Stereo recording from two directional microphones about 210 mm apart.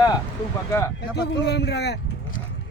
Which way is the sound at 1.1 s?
55° left (ahead or behind).